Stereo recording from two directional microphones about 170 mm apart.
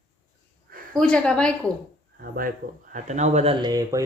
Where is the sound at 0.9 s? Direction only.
5° left (ahead or behind).